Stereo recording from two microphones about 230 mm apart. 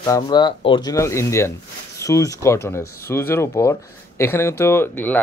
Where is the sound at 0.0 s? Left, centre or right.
Centre.